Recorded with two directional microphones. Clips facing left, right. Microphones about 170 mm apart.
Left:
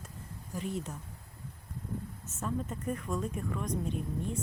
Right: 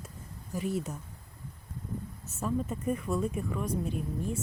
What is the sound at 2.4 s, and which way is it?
Speech, 10° right (ahead or behind).